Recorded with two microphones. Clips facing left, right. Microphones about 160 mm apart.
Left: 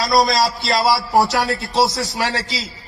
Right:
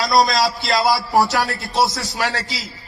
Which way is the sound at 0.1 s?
Centre (ahead or behind).